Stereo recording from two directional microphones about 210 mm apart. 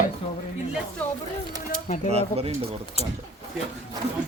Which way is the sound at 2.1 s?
30° right (ahead or behind).